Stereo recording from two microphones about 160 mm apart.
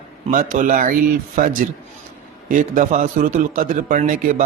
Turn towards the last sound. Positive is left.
turn(degrees=-55)  # may be behind; listen again after turning